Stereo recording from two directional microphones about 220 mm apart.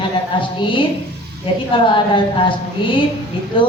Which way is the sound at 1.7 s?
20° left (ahead or behind).